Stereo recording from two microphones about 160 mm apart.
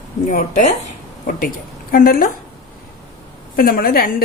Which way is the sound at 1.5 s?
65° left (ahead or behind).